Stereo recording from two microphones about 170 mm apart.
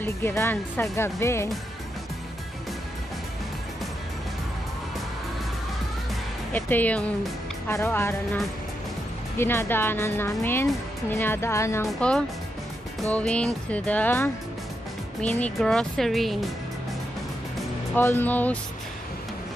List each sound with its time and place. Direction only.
0.0 s a woman's voice: 15° left (ahead or behind)
6.5 s a woman's voice: 10° left (ahead or behind)
9.4 s a woman's voice: 15° left (ahead or behind)
12.0 s a woman's voice: 5° left (ahead or behind)
17.9 s a woman's voice: 10° left (ahead or behind)